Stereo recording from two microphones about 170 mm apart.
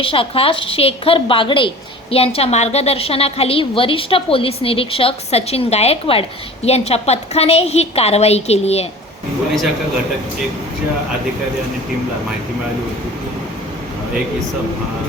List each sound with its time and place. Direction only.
0.0 s a woman's voice: 30° left (ahead or behind)